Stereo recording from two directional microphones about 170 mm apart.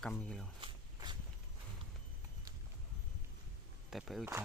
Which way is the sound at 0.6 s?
25° right (ahead or behind).